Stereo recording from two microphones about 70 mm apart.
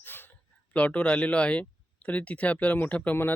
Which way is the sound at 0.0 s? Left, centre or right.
Left.